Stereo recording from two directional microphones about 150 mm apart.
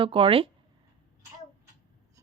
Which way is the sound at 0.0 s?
35° right (ahead or behind).